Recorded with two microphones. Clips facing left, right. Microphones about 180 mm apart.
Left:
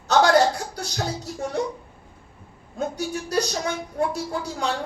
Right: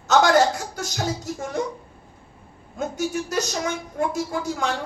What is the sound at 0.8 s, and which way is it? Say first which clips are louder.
Speech: right 2 dB; 35° left (ahead or behind).